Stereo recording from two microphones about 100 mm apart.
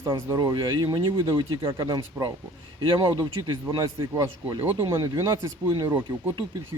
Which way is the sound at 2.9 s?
50° right (ahead or behind).